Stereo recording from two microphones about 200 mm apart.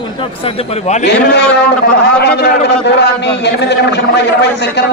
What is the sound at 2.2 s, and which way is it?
A man's voice, 55° left (ahead or behind).